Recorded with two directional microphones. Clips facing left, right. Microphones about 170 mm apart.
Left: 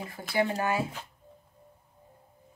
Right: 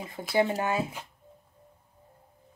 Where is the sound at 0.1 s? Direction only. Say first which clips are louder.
Right 3 dB; 25° right (ahead or behind).